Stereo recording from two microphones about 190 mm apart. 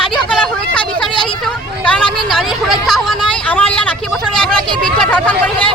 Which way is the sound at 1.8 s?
5° left (ahead or behind).